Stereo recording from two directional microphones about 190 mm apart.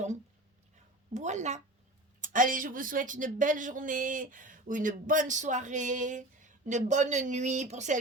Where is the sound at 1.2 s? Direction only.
40° right (ahead or behind).